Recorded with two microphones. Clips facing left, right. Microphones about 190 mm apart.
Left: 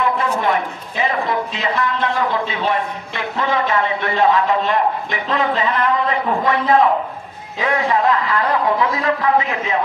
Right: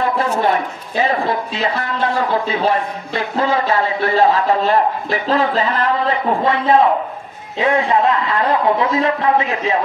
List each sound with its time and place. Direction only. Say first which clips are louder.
0.0 s a man's voice: right 2 dB; 35° right (ahead or behind)
7.5 s a man's voice: right 3 dB; 25° right (ahead or behind)